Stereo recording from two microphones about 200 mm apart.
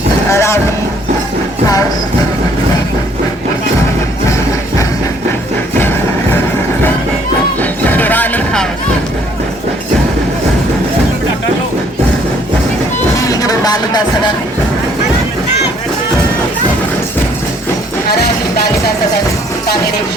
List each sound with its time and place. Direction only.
0.3 s a sound: 15° left (ahead or behind)
7.6 s music: 10° left (ahead or behind)
13.1 s music: 15° left (ahead or behind)
18.1 s music: 50° left (ahead or behind)